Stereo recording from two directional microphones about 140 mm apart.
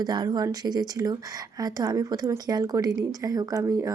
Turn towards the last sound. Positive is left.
turn(degrees=-25)  # may be behind; listen again after turning